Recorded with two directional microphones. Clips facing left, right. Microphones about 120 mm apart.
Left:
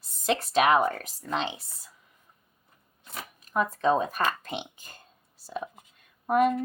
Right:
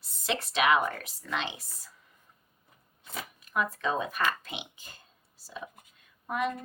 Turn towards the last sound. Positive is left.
turn(degrees=50)  # may be behind; listen again after turning